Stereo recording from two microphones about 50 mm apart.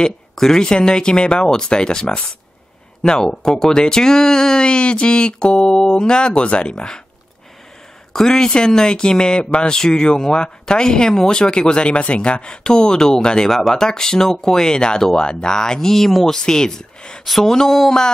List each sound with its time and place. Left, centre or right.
0.0 s speech: centre
8.1 s speech: centre
17.2 s speech: centre